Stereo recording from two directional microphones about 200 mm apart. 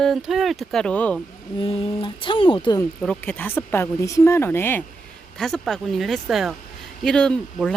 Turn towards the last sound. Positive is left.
turn(degrees=5)  # may be behind; listen again after turning